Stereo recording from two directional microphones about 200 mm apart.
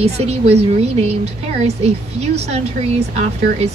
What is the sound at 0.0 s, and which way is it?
Speech, 30° right (ahead or behind).